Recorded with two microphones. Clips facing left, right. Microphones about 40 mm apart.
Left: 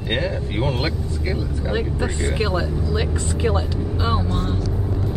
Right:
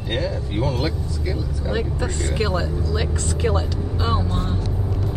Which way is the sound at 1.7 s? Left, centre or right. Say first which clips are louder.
Left 1 dB; centre.